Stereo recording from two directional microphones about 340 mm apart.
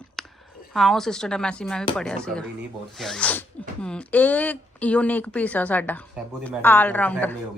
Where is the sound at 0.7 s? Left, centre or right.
Centre.